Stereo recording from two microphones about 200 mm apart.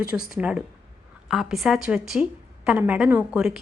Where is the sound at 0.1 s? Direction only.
5° right (ahead or behind).